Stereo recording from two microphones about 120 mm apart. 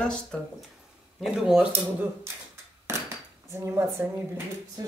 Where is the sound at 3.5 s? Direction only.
20° right (ahead or behind).